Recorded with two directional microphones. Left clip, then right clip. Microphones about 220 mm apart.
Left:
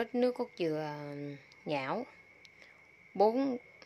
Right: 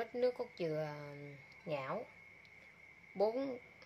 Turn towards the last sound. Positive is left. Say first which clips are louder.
# left 7 dB
turn(degrees=35)  # may be behind; listen again after turning